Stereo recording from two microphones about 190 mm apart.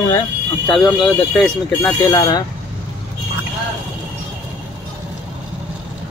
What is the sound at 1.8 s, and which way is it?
Speech, 15° left (ahead or behind).